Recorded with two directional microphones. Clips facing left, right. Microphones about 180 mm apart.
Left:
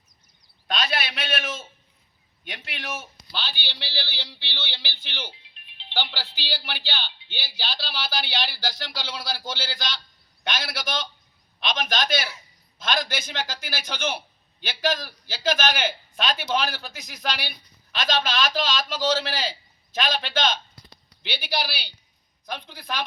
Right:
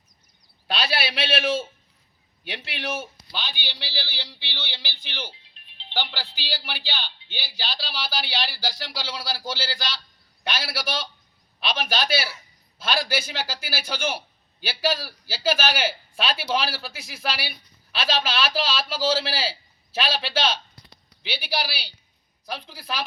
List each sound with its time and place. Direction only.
2.7 s speech: 30° right (ahead or behind)
3.0 s a man's voice: 10° right (ahead or behind)